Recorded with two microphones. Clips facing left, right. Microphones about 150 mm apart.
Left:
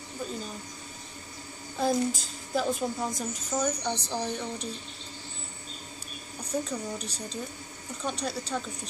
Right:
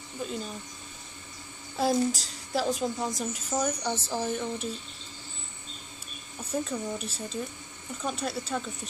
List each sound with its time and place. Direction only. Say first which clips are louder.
1.8 s a woman's voice: right 1 dB; 5° right (ahead or behind)
6.5 s a woman's voice: right 1 dB; 5° right (ahead or behind)